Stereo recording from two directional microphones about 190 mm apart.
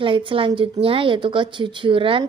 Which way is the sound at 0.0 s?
25° right (ahead or behind).